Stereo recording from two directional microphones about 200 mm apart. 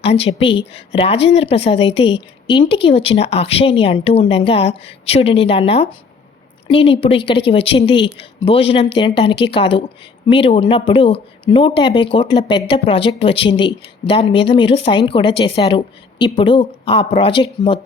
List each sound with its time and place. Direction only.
0.1 s speech: 30° left (ahead or behind)